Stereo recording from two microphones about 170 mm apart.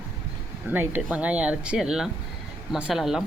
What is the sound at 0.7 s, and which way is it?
Speech, 10° right (ahead or behind).